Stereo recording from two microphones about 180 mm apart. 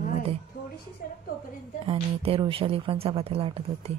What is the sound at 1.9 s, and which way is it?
A woman's voice, 30° right (ahead or behind).